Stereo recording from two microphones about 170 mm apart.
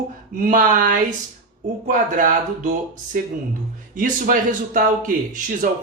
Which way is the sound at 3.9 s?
50° right (ahead or behind).